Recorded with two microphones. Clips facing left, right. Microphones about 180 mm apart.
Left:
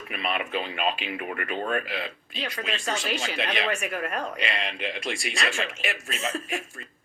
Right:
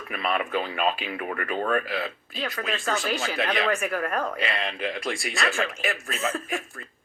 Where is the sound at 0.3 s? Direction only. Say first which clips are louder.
Right 3 dB; 20° left (ahead or behind).